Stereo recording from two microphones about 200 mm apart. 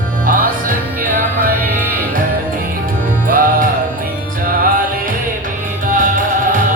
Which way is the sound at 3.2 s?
45° right (ahead or behind).